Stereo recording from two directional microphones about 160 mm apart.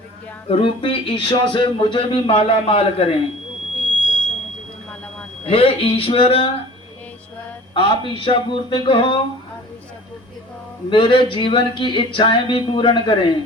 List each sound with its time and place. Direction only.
0.4 s speech: 35° left (ahead or behind)
5.5 s speech: 35° left (ahead or behind)
7.7 s speech: 30° left (ahead or behind)
10.8 s speech: 35° left (ahead or behind)